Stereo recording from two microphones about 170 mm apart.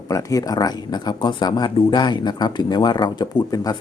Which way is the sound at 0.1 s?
20° left (ahead or behind).